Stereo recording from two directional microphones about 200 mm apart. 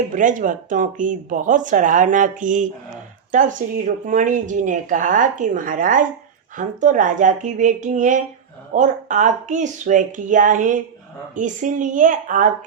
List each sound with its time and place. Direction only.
0.1 s speech: 40° right (ahead or behind)